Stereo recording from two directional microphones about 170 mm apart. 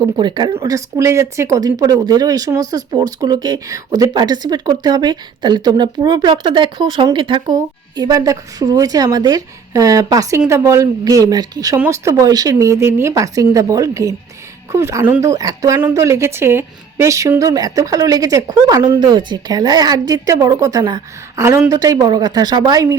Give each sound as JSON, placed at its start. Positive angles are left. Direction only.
{"t": 0.0, "sound": "speech", "side_deg": -25}